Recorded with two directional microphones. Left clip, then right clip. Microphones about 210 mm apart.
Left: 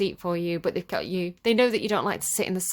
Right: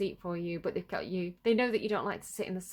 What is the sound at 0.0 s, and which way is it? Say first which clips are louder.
Speech: left 8 dB; 30° left (ahead or behind).